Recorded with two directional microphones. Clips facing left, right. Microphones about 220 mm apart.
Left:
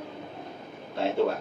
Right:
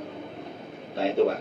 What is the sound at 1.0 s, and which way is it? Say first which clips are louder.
Speech: right 3 dB; 60° right (ahead or behind).